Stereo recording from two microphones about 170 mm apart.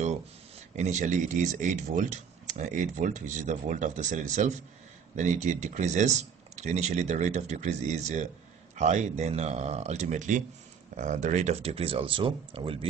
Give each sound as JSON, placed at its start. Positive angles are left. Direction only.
{"t": 0.7, "sound": "speech", "side_deg": -45}